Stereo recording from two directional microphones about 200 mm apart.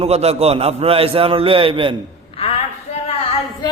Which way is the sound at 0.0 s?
30° right (ahead or behind).